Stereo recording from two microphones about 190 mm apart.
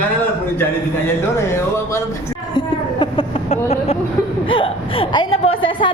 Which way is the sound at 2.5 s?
25° left (ahead or behind).